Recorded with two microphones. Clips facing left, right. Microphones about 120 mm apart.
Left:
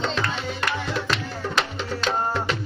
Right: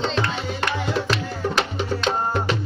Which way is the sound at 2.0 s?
Centre (ahead or behind).